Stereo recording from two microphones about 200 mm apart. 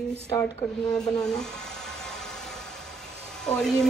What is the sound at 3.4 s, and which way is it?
Speech, 5° left (ahead or behind).